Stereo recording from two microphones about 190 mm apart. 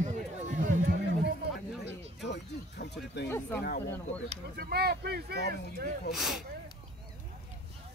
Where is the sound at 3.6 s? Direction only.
60° left (ahead or behind).